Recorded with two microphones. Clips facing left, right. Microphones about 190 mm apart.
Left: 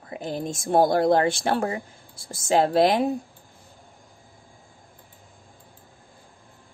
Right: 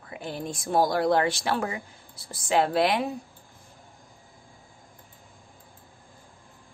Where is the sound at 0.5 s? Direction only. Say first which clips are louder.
Left 4 dB; 50° left (ahead or behind); by 1.8 s 35° left (ahead or behind).